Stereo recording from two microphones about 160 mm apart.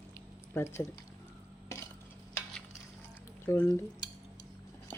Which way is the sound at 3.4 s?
15° left (ahead or behind).